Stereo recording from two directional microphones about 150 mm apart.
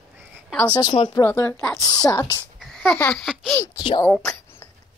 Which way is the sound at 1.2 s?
15° left (ahead or behind).